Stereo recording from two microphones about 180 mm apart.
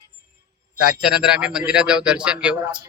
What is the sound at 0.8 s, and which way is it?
Speech, 5° right (ahead or behind).